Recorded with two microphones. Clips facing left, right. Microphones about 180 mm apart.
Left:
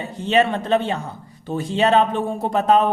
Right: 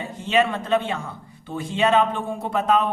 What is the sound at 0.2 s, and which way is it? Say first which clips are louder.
Speech: left 3 dB; 35° left (ahead or behind).